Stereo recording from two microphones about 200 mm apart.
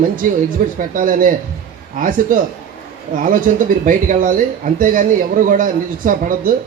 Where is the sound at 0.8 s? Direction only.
45° right (ahead or behind).